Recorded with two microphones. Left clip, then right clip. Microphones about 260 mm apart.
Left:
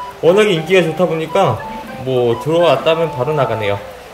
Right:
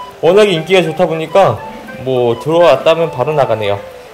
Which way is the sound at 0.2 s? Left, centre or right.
Centre.